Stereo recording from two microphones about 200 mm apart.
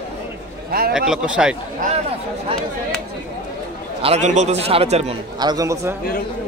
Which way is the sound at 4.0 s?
30° right (ahead or behind).